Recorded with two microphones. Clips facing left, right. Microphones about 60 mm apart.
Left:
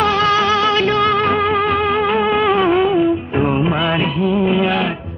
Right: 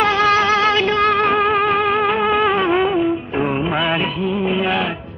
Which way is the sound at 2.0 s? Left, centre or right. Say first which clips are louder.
Left 1 dB; centre.